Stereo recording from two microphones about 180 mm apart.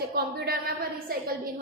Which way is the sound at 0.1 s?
60° right (ahead or behind).